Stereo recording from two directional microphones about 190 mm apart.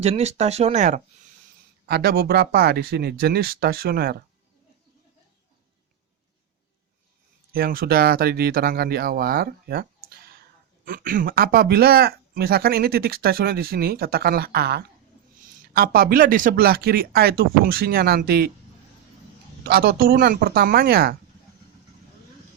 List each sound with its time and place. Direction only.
0.0 s speech: 35° right (ahead or behind)
1.9 s speech: 60° right (ahead or behind)
7.5 s speech: 50° right (ahead or behind)
19.6 s speech: 55° right (ahead or behind)